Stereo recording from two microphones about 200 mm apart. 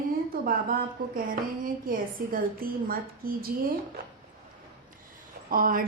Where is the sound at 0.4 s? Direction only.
45° right (ahead or behind).